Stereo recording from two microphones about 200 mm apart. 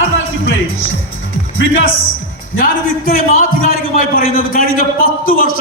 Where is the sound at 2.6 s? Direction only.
45° left (ahead or behind).